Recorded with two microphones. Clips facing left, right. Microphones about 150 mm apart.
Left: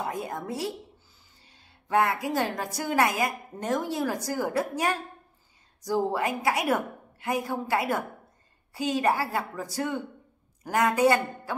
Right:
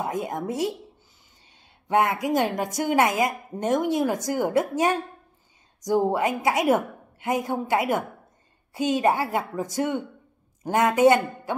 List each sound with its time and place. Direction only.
0.0 s a woman's voice: 20° right (ahead or behind)